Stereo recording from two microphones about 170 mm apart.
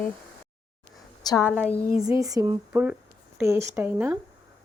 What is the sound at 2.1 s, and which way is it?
A woman's voice, 20° right (ahead or behind).